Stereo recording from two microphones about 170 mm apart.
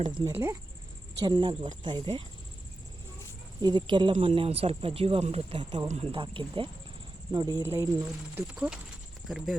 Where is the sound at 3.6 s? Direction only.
25° right (ahead or behind).